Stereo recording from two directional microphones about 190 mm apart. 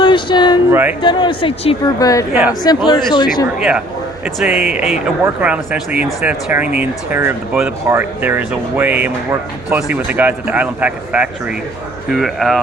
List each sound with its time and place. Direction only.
0.0 s a sound: 25° left (ahead or behind)
0.7 s speech: 10° right (ahead or behind)
1.0 s a woman's voice: 25° left (ahead or behind)
3.6 s speech: 5° right (ahead or behind)